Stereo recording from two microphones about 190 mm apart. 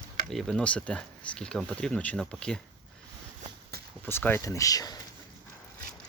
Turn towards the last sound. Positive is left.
turn(degrees=20)  # may be behind; listen again after turning